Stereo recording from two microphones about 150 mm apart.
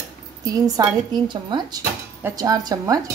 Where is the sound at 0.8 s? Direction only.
25° right (ahead or behind).